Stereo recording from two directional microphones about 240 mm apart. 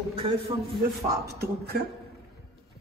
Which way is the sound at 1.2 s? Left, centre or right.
Right.